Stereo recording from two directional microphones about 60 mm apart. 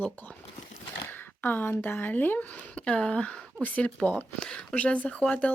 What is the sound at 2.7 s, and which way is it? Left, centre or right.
Speech, centre.